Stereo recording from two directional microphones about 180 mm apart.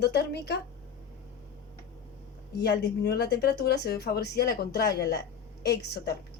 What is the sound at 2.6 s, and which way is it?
Speech, 65° left (ahead or behind).